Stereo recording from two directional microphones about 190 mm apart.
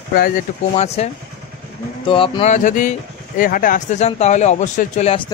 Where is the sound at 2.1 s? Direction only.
30° left (ahead or behind).